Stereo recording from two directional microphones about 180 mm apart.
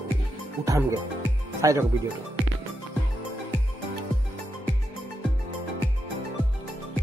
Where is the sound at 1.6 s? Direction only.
15° right (ahead or behind).